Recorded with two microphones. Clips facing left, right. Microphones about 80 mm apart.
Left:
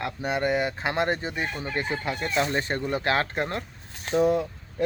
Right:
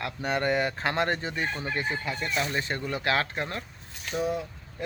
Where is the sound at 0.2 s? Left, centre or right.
Centre.